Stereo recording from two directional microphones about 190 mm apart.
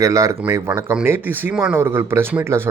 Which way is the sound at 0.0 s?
15° right (ahead or behind).